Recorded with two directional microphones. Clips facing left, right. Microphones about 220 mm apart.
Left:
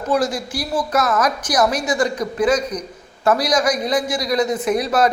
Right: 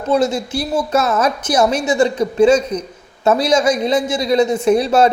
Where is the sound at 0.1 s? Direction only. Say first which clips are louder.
Right 4 dB; 25° right (ahead or behind).